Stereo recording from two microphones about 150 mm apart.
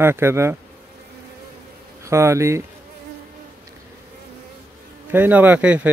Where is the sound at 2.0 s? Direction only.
20° right (ahead or behind).